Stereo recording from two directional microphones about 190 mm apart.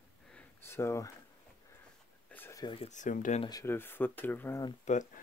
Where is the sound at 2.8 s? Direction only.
40° left (ahead or behind).